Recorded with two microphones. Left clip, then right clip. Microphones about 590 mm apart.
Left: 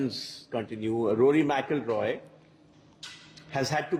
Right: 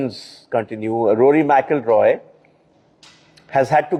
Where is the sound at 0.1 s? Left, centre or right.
Centre.